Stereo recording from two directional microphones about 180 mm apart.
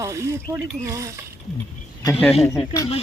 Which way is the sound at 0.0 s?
15° right (ahead or behind).